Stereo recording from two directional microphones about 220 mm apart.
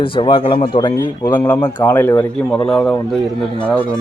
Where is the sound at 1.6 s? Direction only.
20° left (ahead or behind).